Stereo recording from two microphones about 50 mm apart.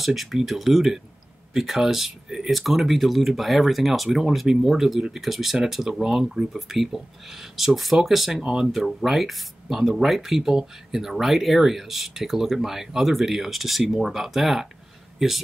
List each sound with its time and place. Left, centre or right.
0.0 s speech: centre
8.4 s speech: centre
8.6 s speech: centre